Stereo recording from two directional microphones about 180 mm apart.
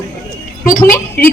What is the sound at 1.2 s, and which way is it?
Speech, 55° left (ahead or behind).